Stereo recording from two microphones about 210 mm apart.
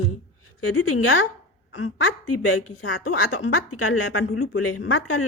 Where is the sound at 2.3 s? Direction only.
80° left.